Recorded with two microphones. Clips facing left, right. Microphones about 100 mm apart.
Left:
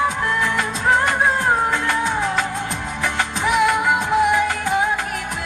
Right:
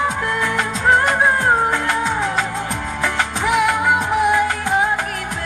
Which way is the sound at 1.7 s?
20° right (ahead or behind).